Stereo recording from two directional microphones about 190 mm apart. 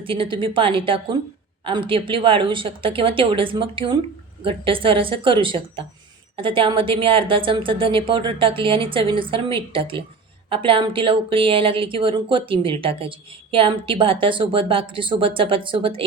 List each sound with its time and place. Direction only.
0.0 s a woman's voice: 25° right (ahead or behind)